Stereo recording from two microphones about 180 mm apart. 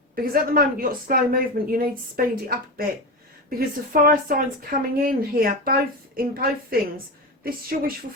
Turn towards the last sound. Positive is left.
turn(degrees=-55)  # may be behind; listen again after turning